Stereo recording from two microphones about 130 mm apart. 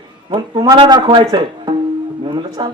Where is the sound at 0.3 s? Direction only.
35° right (ahead or behind).